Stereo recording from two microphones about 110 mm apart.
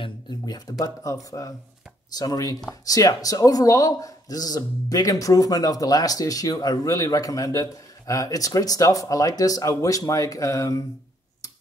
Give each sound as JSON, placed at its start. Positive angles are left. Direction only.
{"t": 0.0, "sound": "a man's voice", "side_deg": 40}